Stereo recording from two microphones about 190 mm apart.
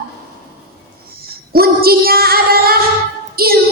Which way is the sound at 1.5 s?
55° right (ahead or behind).